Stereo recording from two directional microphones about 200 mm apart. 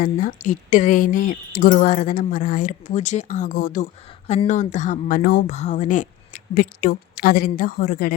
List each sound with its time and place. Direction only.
0.0 s a woman's voice: 40° left (ahead or behind)